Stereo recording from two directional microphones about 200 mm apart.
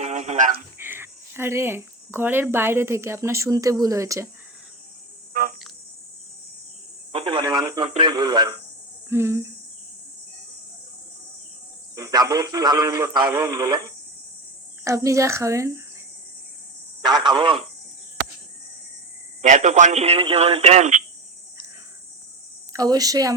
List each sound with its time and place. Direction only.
0.0 s a sound: 35° right (ahead or behind)
0.8 s speech: 10° right (ahead or behind)
7.1 s speech: 30° right (ahead or behind)
11.9 s speech: 15° right (ahead or behind)
14.8 s speech: 15° right (ahead or behind)
17.1 s speech: 20° right (ahead or behind)
19.4 s speech: 35° right (ahead or behind)
22.7 s speech: 20° right (ahead or behind)